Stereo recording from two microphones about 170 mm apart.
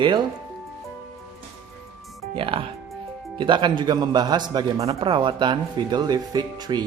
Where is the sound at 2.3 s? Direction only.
30° right (ahead or behind).